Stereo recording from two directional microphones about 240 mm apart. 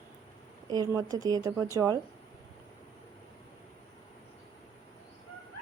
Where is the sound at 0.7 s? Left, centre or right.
Centre.